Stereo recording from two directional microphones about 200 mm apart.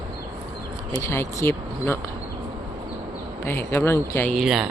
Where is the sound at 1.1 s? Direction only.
10° left (ahead or behind).